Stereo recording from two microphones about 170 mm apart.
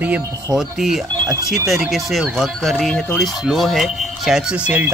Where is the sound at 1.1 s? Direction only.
20° right (ahead or behind).